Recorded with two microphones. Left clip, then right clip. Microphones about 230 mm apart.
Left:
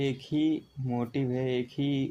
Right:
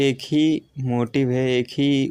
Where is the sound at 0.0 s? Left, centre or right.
Right.